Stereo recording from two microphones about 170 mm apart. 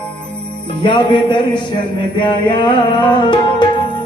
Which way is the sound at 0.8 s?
30° left (ahead or behind).